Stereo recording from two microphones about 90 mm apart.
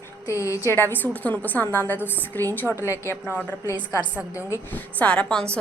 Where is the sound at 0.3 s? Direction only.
35° left (ahead or behind).